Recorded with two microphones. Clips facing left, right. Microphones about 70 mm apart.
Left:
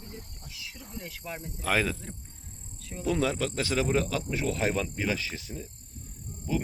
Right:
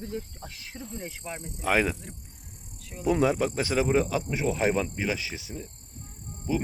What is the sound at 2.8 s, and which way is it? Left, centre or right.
Speech, centre.